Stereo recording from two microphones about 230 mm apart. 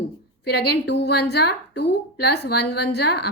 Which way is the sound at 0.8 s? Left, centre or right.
Left.